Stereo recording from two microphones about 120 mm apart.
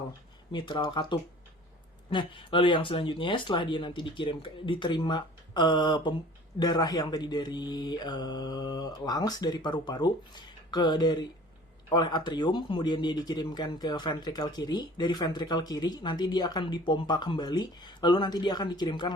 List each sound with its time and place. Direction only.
0.5 s speech: 40° left (ahead or behind)